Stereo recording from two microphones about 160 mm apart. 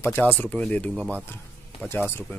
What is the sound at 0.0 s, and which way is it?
Speech, 10° left (ahead or behind).